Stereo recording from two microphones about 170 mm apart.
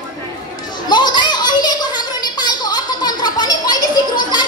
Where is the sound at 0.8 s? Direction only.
25° left (ahead or behind).